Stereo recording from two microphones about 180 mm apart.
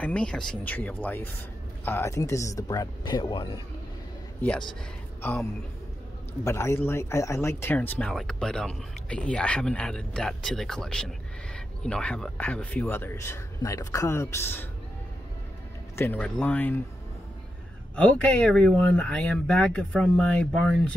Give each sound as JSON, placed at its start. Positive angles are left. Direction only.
{"t": 0.0, "sound": "speech", "side_deg": 5}
{"t": 5.2, "sound": "speech", "side_deg": 10}
{"t": 16.0, "sound": "speech", "side_deg": 10}
{"t": 17.9, "sound": "speech", "side_deg": 5}